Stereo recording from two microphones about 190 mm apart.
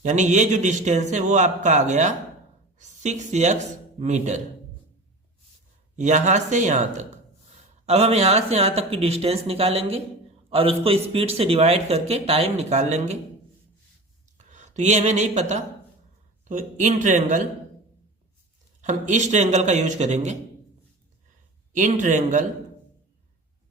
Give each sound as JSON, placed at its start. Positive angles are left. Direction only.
{"t": 0.0, "sound": "a man's voice", "side_deg": -40}
{"t": 6.0, "sound": "a man's voice", "side_deg": -40}
{"t": 14.3, "sound": "a man's voice", "side_deg": -40}
{"t": 18.8, "sound": "a man's voice", "side_deg": -40}
{"t": 21.7, "sound": "a man's voice", "side_deg": -40}